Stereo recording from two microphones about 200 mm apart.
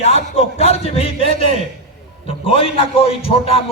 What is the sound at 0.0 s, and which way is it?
A man's voice, 30° left (ahead or behind).